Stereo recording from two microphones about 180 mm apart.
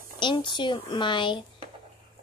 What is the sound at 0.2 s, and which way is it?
A child's voice, 25° left (ahead or behind).